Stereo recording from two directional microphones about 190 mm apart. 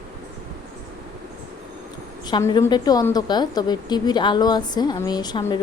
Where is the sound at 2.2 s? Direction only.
20° left (ahead or behind).